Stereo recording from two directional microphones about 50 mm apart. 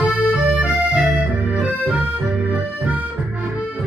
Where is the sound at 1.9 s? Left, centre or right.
Right.